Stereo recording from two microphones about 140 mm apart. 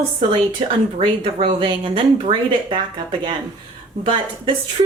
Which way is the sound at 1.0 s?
40° right (ahead or behind).